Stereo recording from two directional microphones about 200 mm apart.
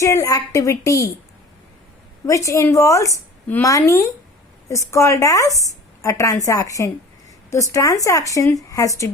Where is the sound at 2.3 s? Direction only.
15° left (ahead or behind).